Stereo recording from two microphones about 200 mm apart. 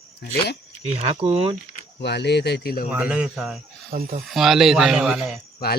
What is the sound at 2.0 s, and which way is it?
Speech, 55° left (ahead or behind).